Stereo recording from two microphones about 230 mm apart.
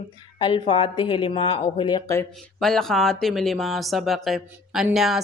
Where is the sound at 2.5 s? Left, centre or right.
Centre.